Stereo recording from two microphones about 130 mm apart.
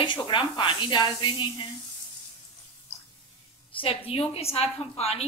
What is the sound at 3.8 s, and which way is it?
A woman's voice, 45° left (ahead or behind).